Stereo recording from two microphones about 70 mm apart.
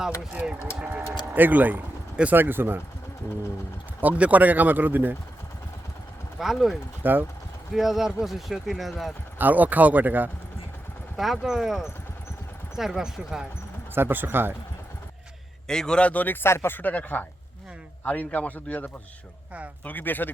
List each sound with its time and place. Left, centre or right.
1.3 s speech: right
4.0 s speech: right
6.4 s speech: centre
7.0 s speech: right
7.7 s speech: centre
9.4 s speech: right
11.2 s speech: centre
13.9 s speech: right
15.6 s speech: centre; by 20.3 s left